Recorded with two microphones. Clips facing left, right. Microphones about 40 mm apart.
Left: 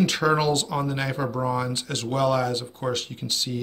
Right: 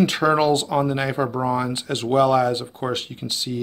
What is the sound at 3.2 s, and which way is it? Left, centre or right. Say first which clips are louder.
Speech: right 1 dB; centre.